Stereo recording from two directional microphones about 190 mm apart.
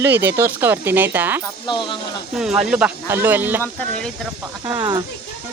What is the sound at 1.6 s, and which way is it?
Speech, 25° left (ahead or behind).